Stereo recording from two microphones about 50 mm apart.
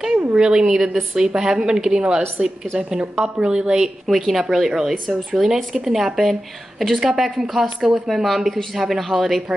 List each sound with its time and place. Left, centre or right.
0.3 s a woman's voice: centre